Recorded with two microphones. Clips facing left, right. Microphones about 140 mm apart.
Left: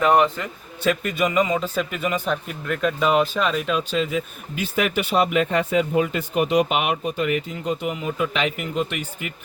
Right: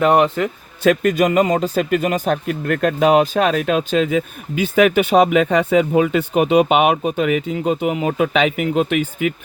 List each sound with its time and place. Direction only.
0.0 s speech: 55° right (ahead or behind)
0.9 s speech: 90° right
1.5 s a man's voice: 40° right (ahead or behind)
1.7 s speech: 75° right (ahead or behind)
2.0 s speech: 50° right (ahead or behind); by 9.3 s 90° right